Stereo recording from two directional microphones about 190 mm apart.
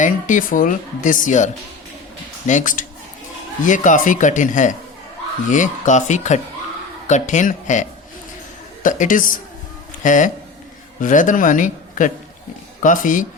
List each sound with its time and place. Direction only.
0.0 s speech: 45° left (ahead or behind)
2.5 s speech: 40° left (ahead or behind)